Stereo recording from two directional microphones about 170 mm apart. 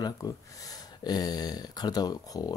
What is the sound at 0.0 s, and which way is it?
Speech, 20° left (ahead or behind).